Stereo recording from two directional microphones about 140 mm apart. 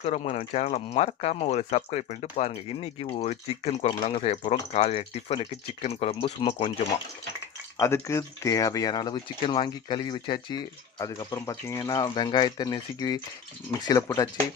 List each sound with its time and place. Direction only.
0.0 s speech: 55° left (ahead or behind)
7.8 s speech: 20° left (ahead or behind)